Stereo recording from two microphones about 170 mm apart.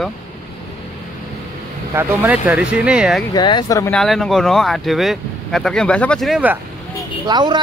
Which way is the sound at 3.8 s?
Centre (ahead or behind).